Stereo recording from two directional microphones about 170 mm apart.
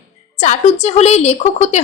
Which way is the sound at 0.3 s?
40° left (ahead or behind).